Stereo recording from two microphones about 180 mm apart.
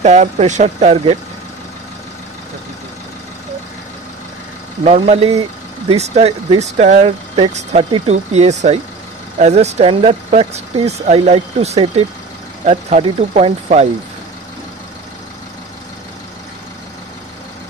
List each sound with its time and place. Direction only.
0.0 s speech: 40° right (ahead or behind)
4.8 s speech: 40° right (ahead or behind)